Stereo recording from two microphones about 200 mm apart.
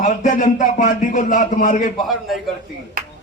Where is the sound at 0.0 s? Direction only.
40° left (ahead or behind).